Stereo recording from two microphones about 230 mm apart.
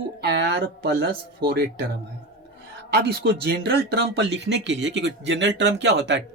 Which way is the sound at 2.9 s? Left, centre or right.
Right.